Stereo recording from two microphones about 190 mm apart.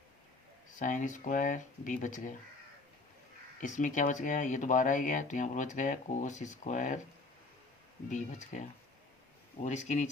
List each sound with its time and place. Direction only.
0.8 s speech: 45° left (ahead or behind)
3.6 s speech: 40° left (ahead or behind)
8.1 s speech: 40° left (ahead or behind)
9.6 s speech: 40° left (ahead or behind)